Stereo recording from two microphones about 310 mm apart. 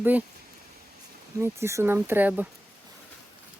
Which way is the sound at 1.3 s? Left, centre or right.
Centre.